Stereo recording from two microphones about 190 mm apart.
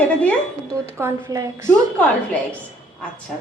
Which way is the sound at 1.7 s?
5° left (ahead or behind).